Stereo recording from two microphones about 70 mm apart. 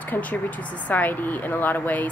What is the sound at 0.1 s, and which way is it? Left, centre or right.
A woman's voice, left.